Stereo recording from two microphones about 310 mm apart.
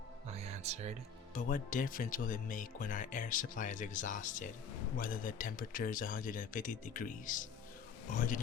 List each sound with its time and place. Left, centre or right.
0.3 s music: right
1.3 s speech: left